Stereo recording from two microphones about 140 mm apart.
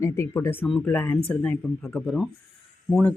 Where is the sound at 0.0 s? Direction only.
20° left (ahead or behind).